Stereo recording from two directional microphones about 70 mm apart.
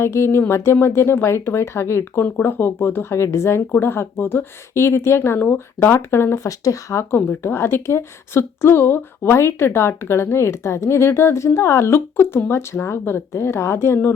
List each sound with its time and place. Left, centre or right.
0.0 s speech: left
7.3 s speech: left